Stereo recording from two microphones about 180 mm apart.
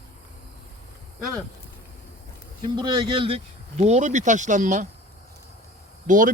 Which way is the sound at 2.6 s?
25° right (ahead or behind).